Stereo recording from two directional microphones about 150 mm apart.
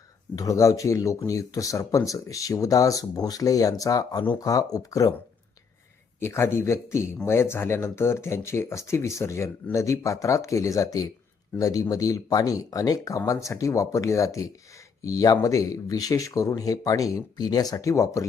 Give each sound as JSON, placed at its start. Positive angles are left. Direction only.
{"t": 0.3, "sound": "speech", "side_deg": 20}
{"t": 6.1, "sound": "speech", "side_deg": 15}